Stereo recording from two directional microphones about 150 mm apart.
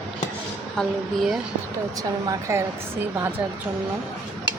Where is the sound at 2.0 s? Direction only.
20° right (ahead or behind).